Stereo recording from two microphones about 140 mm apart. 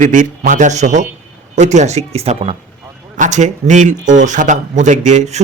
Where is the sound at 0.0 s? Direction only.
65° right (ahead or behind).